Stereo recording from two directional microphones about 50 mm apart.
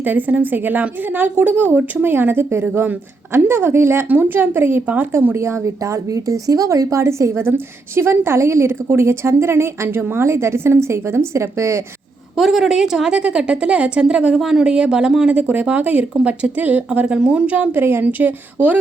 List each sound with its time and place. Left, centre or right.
0.0 s a woman's voice: right
2.5 s a woman's voice: right
4.1 s a woman's voice: right
5.3 s speech: right
7.4 s a woman's voice: right
10.0 s a woman's voice: right
10.2 s a woman's voice: right
12.4 s a woman's voice: centre; by 14.3 s right
14.3 s speech: centre
15.3 s a woman's voice: right
17.1 s a woman's voice: centre
17.7 s a woman's voice: right
18.0 s a woman's voice: right